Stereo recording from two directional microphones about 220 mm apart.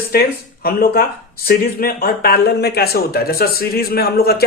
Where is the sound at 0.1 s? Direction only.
45° left (ahead or behind).